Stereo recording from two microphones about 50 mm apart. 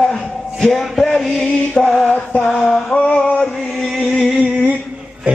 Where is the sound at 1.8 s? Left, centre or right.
Centre.